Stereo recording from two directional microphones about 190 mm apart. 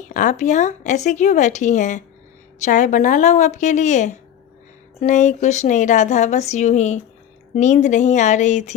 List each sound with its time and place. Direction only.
0.0 s a woman's voice: 40° left (ahead or behind)